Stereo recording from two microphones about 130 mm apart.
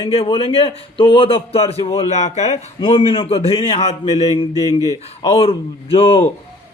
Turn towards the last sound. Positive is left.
turn(degrees=50)  # may be behind; listen again after turning